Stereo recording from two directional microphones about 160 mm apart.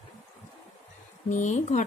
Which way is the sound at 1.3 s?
50° left (ahead or behind).